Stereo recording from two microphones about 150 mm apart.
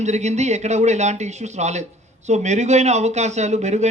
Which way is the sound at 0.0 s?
50° right (ahead or behind).